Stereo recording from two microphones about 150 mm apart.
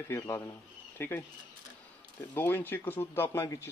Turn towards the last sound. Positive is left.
turn(degrees=20)  # may be behind; listen again after turning